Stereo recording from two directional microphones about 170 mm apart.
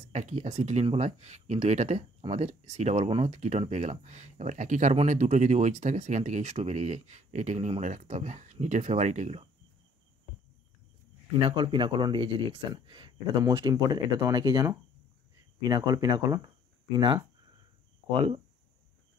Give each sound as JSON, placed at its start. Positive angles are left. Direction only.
{"t": 0.1, "sound": "speech", "side_deg": -45}
{"t": 11.4, "sound": "speech", "side_deg": -30}